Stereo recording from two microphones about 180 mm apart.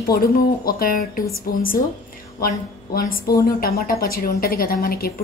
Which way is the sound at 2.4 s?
55° left (ahead or behind).